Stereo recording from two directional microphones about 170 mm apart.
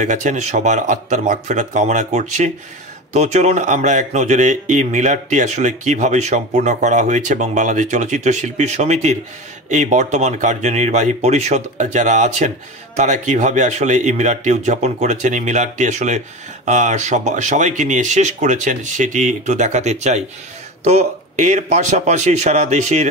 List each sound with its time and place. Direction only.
0.0 s speech: 45° right (ahead or behind)